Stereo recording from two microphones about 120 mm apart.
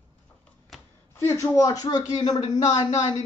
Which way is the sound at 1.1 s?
20° left (ahead or behind).